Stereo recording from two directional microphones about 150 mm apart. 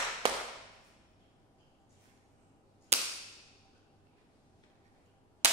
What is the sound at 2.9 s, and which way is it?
Cap gun, 45° right (ahead or behind).